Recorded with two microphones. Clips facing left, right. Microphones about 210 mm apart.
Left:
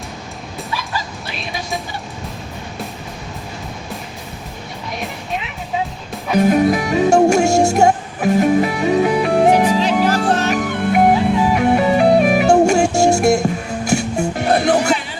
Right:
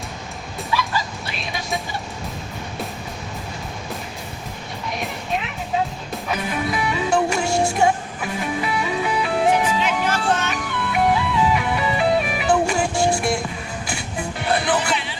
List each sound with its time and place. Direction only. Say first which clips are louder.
6.3 s music: left 12 dB; 45° left (ahead or behind)